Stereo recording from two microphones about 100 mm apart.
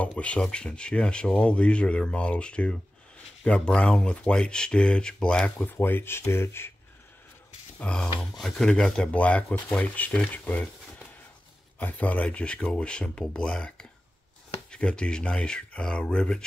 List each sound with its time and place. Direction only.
0.2 s speech: 10° left (ahead or behind)
5.7 s speech: 20° left (ahead or behind)
7.8 s speech: 10° left (ahead or behind)
11.8 s speech: 15° left (ahead or behind)